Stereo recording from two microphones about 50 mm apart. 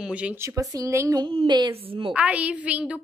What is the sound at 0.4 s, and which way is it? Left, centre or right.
Speech, right.